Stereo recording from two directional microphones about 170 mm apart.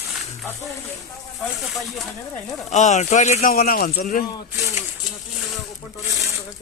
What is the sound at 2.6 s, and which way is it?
Speech, 45° left (ahead or behind).